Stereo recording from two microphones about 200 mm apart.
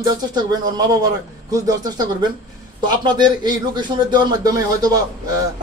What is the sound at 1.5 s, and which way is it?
Speech, 20° right (ahead or behind).